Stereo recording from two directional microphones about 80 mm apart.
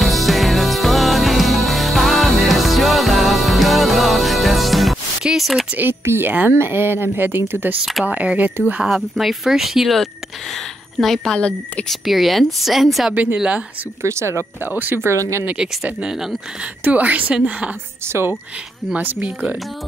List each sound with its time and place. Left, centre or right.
0.0 s music: centre
5.8 s speech: right
8.8 s speech: centre
11.9 s speech: centre
13.1 s speech: right
14.0 s speech: right
15.0 s speech: right
15.4 s speech: centre
16.8 s speech: centre
18.0 s speech: right